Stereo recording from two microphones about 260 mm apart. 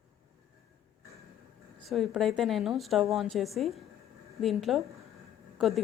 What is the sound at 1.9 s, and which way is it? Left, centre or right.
A woman's voice, centre.